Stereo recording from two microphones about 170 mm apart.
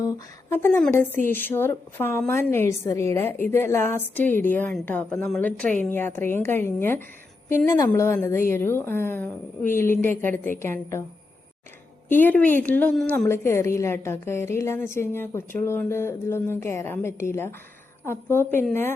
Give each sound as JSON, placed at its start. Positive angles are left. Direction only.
{"t": 0.5, "sound": "a woman's voice", "side_deg": 10}
{"t": 12.0, "sound": "a woman's voice", "side_deg": 10}
{"t": 13.2, "sound": "a woman's voice", "side_deg": 15}